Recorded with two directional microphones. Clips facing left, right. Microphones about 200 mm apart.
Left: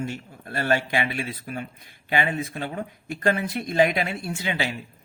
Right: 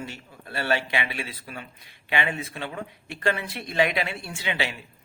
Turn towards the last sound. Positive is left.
turn(degrees=40)  # may be behind; listen again after turning